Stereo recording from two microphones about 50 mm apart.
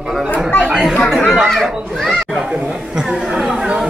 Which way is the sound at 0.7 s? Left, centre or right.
Centre.